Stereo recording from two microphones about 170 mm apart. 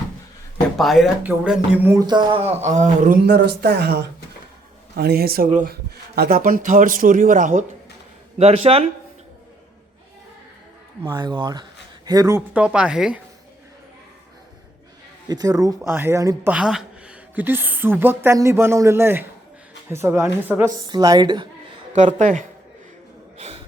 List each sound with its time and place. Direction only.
0.8 s speech: centre (ahead or behind); by 3.2 s 45° right (ahead or behind)
3.2 s a man's voice: 75° right (ahead or behind); by 7.6 s 50° right (ahead or behind)
8.4 s speech: 35° right (ahead or behind)
11.0 s speech: 25° right (ahead or behind)
12.5 s speech: 5° right (ahead or behind)
15.3 s speech: 20° right (ahead or behind)
21.9 s speech: 45° right (ahead or behind)
23.4 s gasp: 40° right (ahead or behind)